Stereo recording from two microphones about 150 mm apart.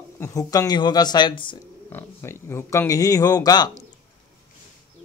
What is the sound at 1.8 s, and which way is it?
Speech, 15° left (ahead or behind).